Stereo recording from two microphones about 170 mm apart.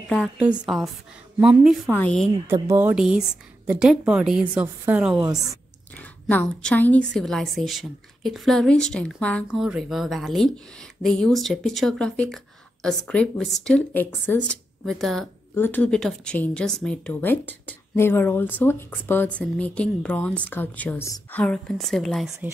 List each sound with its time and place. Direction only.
0.6 s a woman's voice: centre (ahead or behind)
1.9 s a woman's voice: 10° left (ahead or behind)
2.4 s speech: 15° right (ahead or behind)
2.9 s a woman's voice: 5° right (ahead or behind)
5.9 s a woman's voice: 10° left (ahead or behind)